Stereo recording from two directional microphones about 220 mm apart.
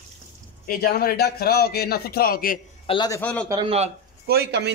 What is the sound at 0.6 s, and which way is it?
A man's voice, 40° left (ahead or behind).